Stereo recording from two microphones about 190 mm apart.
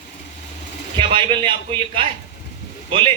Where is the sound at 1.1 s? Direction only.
25° right (ahead or behind).